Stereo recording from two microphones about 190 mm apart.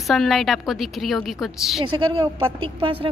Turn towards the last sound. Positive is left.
turn(degrees=-25)  # may be behind; listen again after turning